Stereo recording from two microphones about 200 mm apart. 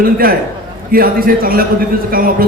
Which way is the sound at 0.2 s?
45° right (ahead or behind).